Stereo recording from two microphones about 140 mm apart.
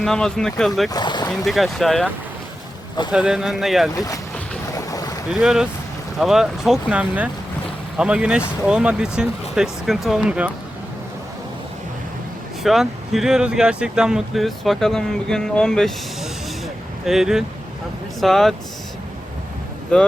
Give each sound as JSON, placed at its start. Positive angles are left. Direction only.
{"t": 0.0, "sound": "speech", "side_deg": 5}
{"t": 0.9, "sound": "speech", "side_deg": 30}
{"t": 1.5, "sound": "speech", "side_deg": 0}
{"t": 3.9, "sound": "speech", "side_deg": 25}
{"t": 4.9, "sound": "boat", "side_deg": 25}
{"t": 5.3, "sound": "speech", "side_deg": -5}
{"t": 12.6, "sound": "speech", "side_deg": 0}
{"t": 19.9, "sound": "speech", "side_deg": 5}